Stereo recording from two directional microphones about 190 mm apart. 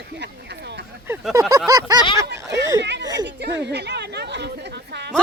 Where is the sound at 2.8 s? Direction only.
65° right (ahead or behind).